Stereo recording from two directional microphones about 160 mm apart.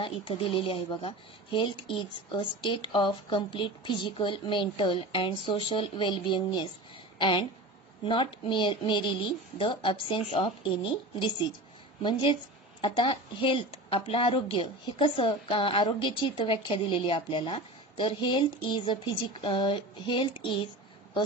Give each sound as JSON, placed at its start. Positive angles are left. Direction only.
{"t": 0.0, "sound": "a woman's voice", "side_deg": 35}